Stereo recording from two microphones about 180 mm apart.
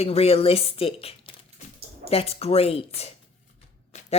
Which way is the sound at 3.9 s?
35° left (ahead or behind).